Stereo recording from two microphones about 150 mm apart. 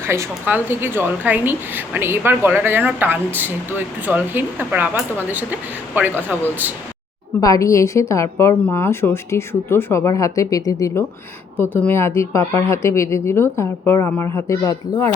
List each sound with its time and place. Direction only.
0.0 s a woman's voice: 15° right (ahead or behind)
7.4 s a woman's voice: 20° left (ahead or behind)